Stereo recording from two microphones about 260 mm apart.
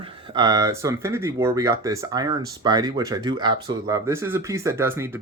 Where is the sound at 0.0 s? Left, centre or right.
Centre.